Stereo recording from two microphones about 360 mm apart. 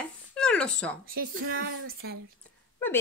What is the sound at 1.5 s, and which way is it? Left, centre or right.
Speech, right.